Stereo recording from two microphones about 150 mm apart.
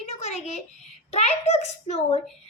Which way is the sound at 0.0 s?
50° left (ahead or behind).